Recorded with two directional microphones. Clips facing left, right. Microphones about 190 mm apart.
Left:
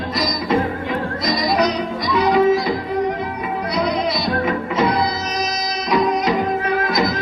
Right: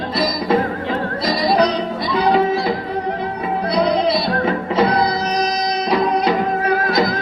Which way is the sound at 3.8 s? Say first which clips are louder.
Right 4 dB; 30° right (ahead or behind).